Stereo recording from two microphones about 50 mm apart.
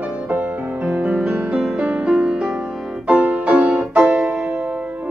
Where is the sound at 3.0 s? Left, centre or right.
Right.